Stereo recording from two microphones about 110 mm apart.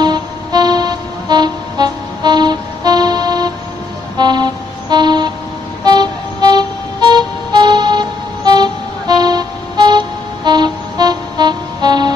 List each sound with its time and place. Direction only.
0.0 s music: 40° right (ahead or behind)